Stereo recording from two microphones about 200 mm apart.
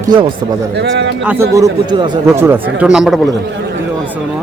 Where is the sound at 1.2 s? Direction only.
10° right (ahead or behind).